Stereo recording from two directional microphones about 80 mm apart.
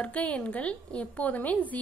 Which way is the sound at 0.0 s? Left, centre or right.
Centre.